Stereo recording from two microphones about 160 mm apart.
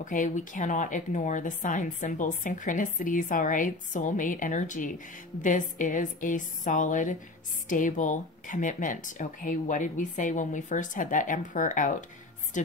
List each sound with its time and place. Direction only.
0.0 s a woman's voice: 50° left (ahead or behind)